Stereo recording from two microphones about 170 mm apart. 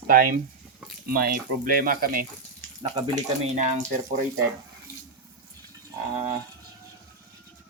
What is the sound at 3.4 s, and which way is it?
Speech, 45° right (ahead or behind).